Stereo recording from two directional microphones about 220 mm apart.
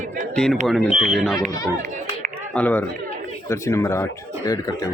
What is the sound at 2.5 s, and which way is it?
Speech, 5° left (ahead or behind).